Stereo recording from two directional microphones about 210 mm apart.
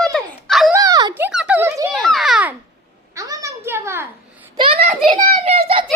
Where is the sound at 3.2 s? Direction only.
15° right (ahead or behind).